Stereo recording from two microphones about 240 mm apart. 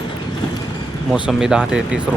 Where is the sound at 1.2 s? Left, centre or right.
Centre.